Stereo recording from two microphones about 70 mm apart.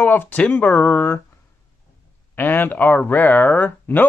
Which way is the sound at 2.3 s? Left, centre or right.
Left.